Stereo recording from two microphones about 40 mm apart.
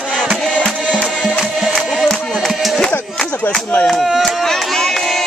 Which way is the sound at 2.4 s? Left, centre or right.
Centre.